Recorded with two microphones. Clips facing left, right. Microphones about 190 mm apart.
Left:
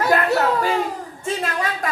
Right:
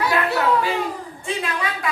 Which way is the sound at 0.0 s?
45° left (ahead or behind).